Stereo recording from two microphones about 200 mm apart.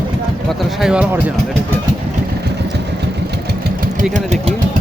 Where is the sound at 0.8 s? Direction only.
5° right (ahead or behind).